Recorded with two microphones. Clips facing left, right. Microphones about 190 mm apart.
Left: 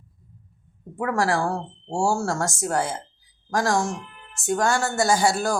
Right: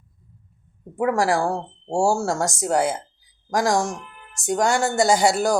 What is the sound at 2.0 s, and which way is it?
Speech, 20° right (ahead or behind).